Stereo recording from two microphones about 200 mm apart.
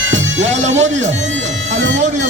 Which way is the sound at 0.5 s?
35° right (ahead or behind).